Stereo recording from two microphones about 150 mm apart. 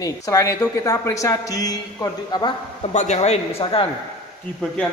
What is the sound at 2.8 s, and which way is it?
A man's voice, 50° left (ahead or behind).